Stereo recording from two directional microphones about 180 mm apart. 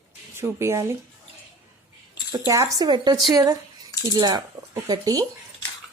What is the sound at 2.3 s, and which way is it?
Speech, 20° right (ahead or behind).